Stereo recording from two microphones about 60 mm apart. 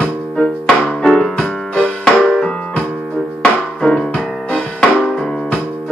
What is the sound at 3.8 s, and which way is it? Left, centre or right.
Music, centre.